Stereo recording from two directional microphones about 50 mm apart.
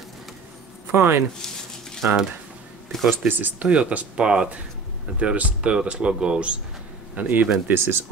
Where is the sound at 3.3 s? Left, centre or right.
Right.